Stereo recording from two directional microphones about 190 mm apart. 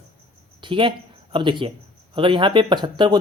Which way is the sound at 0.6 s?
25° right (ahead or behind).